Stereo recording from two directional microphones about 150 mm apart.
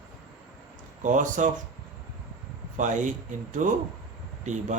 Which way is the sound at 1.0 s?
60° right (ahead or behind).